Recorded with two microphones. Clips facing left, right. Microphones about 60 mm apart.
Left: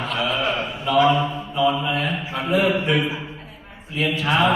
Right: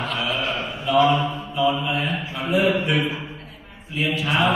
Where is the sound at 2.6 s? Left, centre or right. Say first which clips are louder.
Even; centre.